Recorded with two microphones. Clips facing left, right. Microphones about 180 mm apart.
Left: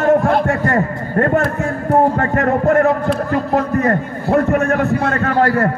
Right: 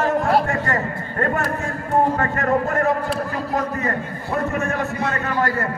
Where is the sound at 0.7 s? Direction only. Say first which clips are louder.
Left 6 dB; 45° left (ahead or behind).